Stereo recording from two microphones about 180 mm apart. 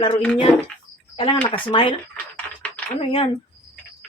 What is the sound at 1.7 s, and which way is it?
Speech, 30° left (ahead or behind).